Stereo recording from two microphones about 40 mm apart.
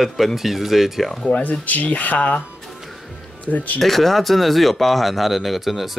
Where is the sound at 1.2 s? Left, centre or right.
Left.